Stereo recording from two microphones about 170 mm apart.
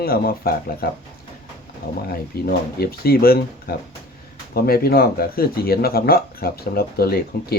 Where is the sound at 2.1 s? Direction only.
65° left (ahead or behind).